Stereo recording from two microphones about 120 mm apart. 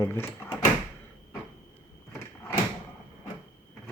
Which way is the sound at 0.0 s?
20° left (ahead or behind).